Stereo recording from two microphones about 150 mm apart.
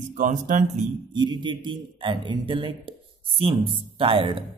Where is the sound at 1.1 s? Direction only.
30° right (ahead or behind).